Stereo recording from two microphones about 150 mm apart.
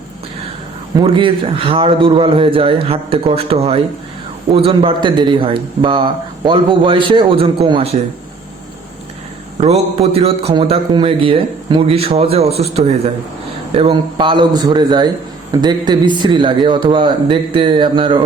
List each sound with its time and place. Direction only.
1.0 s a man's voice: 35° right (ahead or behind)
9.6 s a man's voice: 45° right (ahead or behind)